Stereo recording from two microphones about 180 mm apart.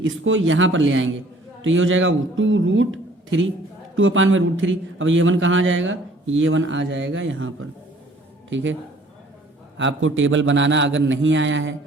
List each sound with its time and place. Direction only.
0.0 s a man's voice: 90° right
9.7 s a man's voice: 90° right